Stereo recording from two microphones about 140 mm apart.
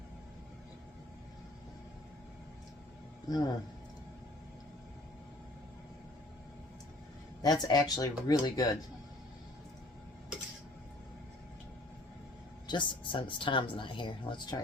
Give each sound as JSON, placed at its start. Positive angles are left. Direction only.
{"t": 3.2, "sound": "speech", "side_deg": 30}
{"t": 7.4, "sound": "speech", "side_deg": 30}
{"t": 12.6, "sound": "speech", "side_deg": 35}